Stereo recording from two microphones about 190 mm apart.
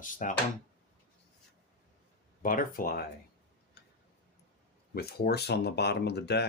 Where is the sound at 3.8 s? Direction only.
60° left (ahead or behind).